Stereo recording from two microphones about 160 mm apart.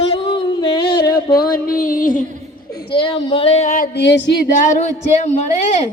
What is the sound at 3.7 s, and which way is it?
Music, 75° left (ahead or behind).